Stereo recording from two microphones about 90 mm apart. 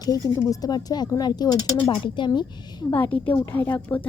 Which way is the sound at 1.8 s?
65° left (ahead or behind).